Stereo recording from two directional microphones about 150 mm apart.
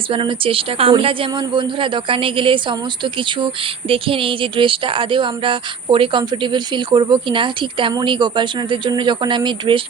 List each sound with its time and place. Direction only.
0.1 s a woman's voice: 35° right (ahead or behind)